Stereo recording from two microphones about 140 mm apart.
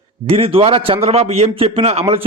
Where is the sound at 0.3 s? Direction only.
40° right (ahead or behind).